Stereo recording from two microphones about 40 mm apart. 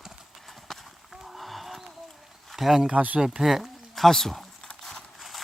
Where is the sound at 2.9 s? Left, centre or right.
Right.